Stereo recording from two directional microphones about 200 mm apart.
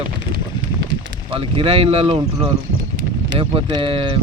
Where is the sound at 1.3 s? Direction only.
25° right (ahead or behind).